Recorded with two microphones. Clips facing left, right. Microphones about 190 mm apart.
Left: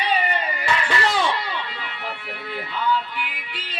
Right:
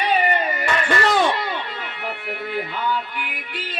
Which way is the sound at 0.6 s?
50° right (ahead or behind).